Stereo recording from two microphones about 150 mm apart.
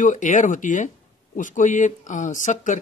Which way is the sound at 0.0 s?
55° left (ahead or behind).